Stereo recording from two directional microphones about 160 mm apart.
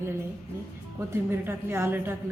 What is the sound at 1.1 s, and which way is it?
Speech, 15° right (ahead or behind).